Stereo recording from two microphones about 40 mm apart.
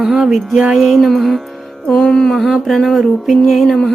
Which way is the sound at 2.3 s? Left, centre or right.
Centre.